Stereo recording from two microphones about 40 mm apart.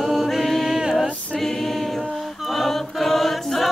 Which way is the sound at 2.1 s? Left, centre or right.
Centre.